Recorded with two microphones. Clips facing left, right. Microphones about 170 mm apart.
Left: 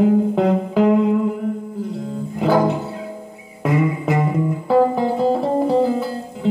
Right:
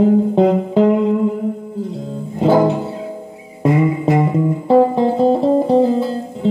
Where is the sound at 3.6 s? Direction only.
25° right (ahead or behind).